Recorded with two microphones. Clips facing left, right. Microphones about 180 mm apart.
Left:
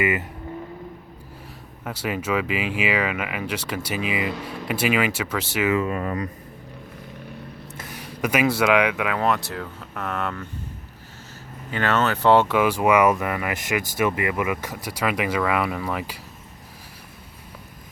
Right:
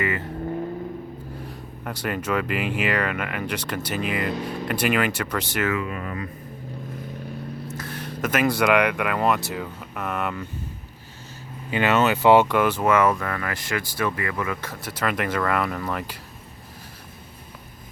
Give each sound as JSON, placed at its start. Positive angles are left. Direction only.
{"t": 0.0, "sound": "speech", "side_deg": 15}
{"t": 1.8, "sound": "speech", "side_deg": 5}
{"t": 5.7, "sound": "speech", "side_deg": 35}
{"t": 7.8, "sound": "speech", "side_deg": 10}
{"t": 11.7, "sound": "speech", "side_deg": -15}
{"t": 12.5, "sound": "speech", "side_deg": 5}